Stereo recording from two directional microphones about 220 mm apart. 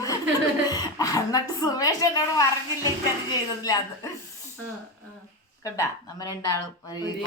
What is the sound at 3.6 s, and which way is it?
Speech, 15° left (ahead or behind).